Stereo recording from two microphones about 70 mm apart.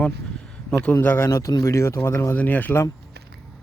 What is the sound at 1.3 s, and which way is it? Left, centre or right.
Speech, left.